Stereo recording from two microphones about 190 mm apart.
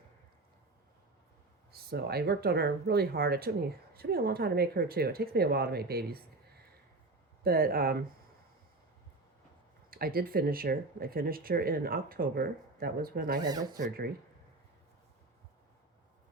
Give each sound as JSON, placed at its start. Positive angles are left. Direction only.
{"t": 1.9, "sound": "speech", "side_deg": -55}
{"t": 7.4, "sound": "speech", "side_deg": -50}
{"t": 9.9, "sound": "speech", "side_deg": -50}
{"t": 13.4, "sound": "speech", "side_deg": -20}
{"t": 13.7, "sound": "speech", "side_deg": -50}